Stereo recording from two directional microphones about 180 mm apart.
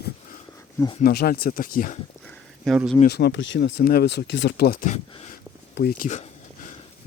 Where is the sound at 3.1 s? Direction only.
65° left (ahead or behind); by 5.4 s 45° left (ahead or behind).